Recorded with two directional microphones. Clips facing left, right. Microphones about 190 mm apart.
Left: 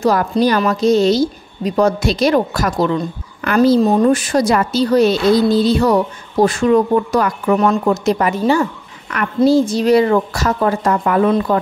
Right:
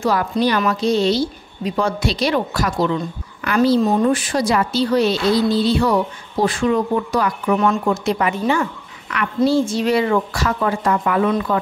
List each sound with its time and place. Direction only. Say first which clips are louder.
0.0 s a woman's voice: left 4 dB; 40° left (ahead or behind)